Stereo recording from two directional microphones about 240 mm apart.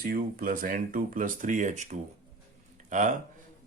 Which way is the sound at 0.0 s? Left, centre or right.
Right.